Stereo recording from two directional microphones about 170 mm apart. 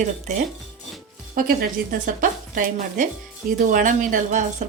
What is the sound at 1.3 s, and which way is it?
A woman's voice, 60° right (ahead or behind).